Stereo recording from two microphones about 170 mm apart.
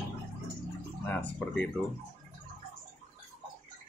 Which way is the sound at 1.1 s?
5° left (ahead or behind).